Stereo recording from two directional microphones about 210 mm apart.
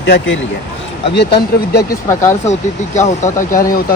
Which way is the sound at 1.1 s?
50° left (ahead or behind).